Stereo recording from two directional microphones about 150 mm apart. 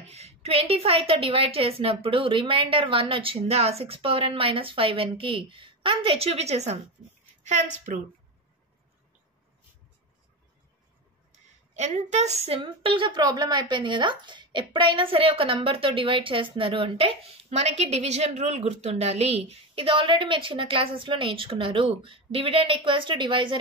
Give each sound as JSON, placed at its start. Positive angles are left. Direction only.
{"t": 0.1, "sound": "a woman's voice", "side_deg": -45}
{"t": 11.7, "sound": "a woman's voice", "side_deg": -50}